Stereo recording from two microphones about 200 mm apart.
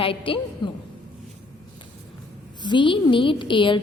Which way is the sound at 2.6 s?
25° left (ahead or behind).